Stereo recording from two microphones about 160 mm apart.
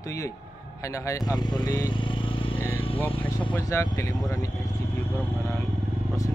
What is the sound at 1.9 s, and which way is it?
Vehicle, 30° left (ahead or behind).